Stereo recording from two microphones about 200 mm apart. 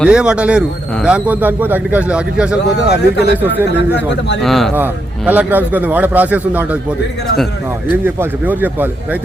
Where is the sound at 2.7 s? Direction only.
55° left (ahead or behind).